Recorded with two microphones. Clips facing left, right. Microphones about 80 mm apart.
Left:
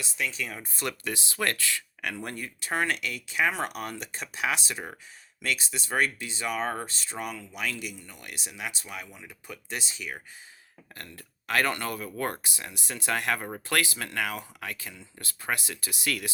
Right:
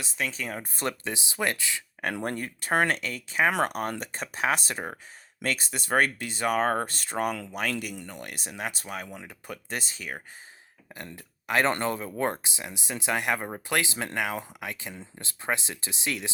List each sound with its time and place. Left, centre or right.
0.0 s speech: right
1.0 s speech: centre
2.2 s speech: right
10.9 s speech: centre